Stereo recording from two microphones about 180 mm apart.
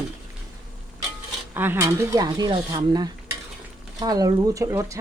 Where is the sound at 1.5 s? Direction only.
10° right (ahead or behind).